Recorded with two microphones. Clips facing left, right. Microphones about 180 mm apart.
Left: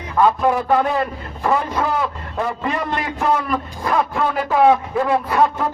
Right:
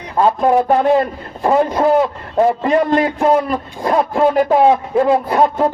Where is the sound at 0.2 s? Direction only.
30° right (ahead or behind).